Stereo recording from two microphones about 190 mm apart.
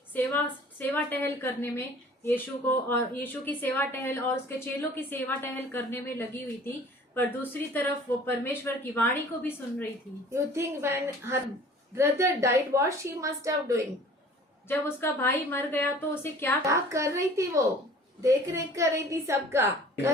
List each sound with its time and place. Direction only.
0.1 s a woman's voice: 10° left (ahead or behind)
10.3 s a woman's voice: 15° right (ahead or behind)
14.7 s a woman's voice: 10° left (ahead or behind)
16.6 s a woman's voice: 15° right (ahead or behind)